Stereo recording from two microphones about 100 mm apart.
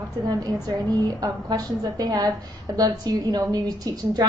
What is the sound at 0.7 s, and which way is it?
A woman's voice, 40° right (ahead or behind).